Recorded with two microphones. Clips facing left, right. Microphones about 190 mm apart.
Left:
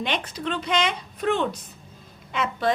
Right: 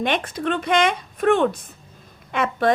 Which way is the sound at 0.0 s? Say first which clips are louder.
Right 5 dB; 50° right (ahead or behind).